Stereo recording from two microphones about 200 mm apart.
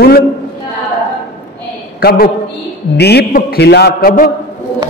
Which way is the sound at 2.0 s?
50° left (ahead or behind).